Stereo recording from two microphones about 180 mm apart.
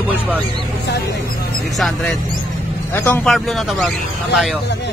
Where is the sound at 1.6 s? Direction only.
Centre (ahead or behind).